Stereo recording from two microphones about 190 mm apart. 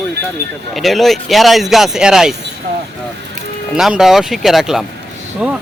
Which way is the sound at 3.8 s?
Centre (ahead or behind).